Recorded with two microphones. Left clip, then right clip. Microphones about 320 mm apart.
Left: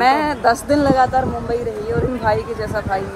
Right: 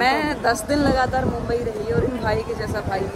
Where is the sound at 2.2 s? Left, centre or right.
Centre.